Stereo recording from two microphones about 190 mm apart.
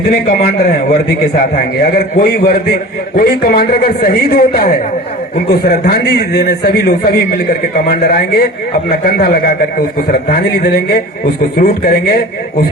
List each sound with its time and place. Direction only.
0.3 s a man's voice: 55° left (ahead or behind)